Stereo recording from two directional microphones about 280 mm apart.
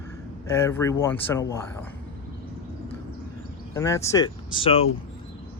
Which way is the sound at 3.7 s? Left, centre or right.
Centre.